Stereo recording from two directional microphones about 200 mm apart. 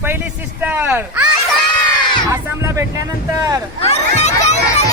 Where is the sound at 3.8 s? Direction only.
35° left (ahead or behind).